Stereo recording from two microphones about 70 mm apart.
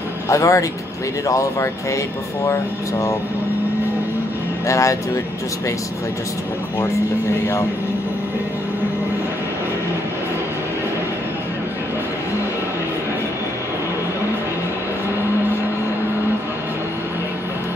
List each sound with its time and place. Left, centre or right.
0.3 s speech: left
4.6 s speech: left